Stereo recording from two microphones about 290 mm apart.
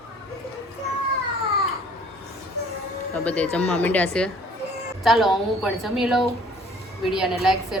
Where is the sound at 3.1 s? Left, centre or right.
Centre.